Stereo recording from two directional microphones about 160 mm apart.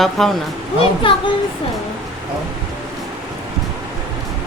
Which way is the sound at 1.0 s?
35° left (ahead or behind).